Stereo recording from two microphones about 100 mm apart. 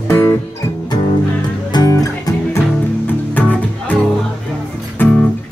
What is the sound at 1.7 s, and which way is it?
Music, 35° left (ahead or behind).